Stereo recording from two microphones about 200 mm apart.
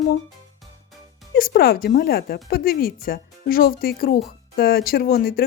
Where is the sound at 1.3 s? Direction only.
50° left (ahead or behind).